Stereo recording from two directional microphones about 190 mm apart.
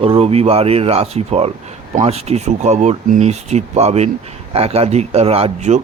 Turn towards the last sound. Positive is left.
turn(degrees=-35)  # may be behind; listen again after turning